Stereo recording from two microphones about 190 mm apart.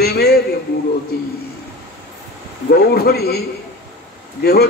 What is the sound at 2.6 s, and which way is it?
Speech, 55° left (ahead or behind).